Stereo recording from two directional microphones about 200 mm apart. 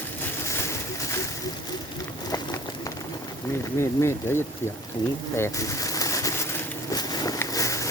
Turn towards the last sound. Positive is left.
turn(degrees=15)  # may be behind; listen again after turning